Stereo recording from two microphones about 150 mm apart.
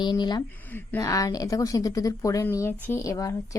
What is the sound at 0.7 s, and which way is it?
A woman's voice, 15° left (ahead or behind).